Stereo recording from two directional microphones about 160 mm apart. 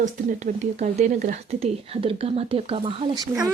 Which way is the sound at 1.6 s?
35° right (ahead or behind).